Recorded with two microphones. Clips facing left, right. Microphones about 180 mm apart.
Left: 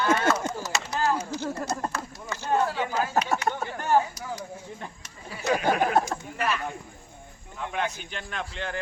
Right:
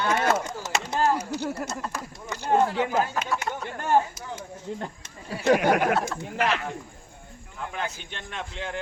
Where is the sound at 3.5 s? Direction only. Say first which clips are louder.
Left 3 dB; 50° left (ahead or behind).